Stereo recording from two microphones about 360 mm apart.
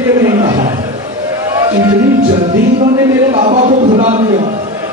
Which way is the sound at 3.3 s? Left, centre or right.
Centre.